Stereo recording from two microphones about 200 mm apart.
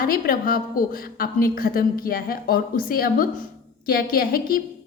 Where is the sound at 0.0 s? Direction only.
45° left (ahead or behind).